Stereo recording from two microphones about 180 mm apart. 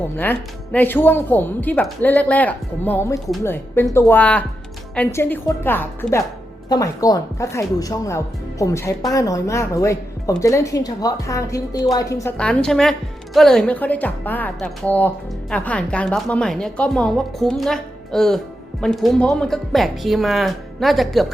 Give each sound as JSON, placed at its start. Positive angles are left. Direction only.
{"t": 0.2, "sound": "speech", "side_deg": 10}
{"t": 12.4, "sound": "a woman's voice", "side_deg": 5}